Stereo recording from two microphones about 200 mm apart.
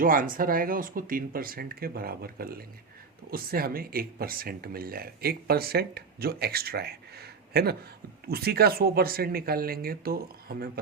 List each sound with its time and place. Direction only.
0.0 s speech: 45° right (ahead or behind)